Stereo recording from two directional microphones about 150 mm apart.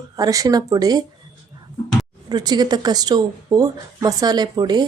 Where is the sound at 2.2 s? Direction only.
30° right (ahead or behind).